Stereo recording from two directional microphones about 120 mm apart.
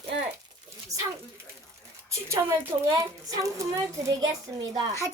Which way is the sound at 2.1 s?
25° right (ahead or behind).